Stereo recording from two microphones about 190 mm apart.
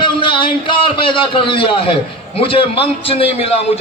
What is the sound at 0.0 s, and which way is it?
A man's voice, 25° left (ahead or behind).